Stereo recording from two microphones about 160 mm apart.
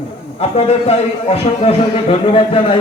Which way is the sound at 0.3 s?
40° left (ahead or behind).